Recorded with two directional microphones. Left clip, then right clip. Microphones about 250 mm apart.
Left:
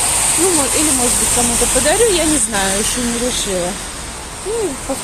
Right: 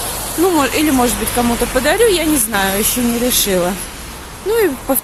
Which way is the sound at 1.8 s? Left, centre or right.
Centre.